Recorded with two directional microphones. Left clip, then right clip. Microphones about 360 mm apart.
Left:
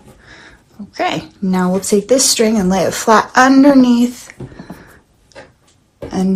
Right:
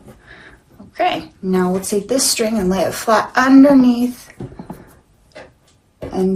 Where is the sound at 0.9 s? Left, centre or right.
Centre.